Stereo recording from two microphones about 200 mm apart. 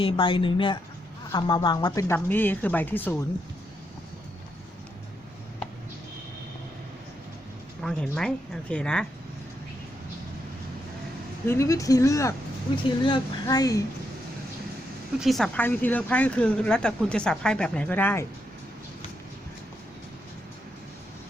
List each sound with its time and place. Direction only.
0.0 s speech: 25° left (ahead or behind)
7.8 s speech: 5° left (ahead or behind)
11.4 s speech: 15° left (ahead or behind)
15.2 s speech: centre (ahead or behind)